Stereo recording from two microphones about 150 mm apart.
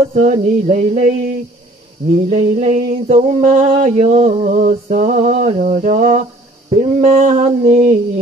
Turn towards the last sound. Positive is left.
turn(degrees=-45)  # may be behind; listen again after turning